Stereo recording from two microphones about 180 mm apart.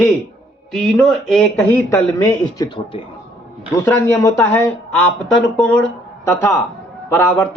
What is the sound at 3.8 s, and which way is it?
Speech, 10° left (ahead or behind).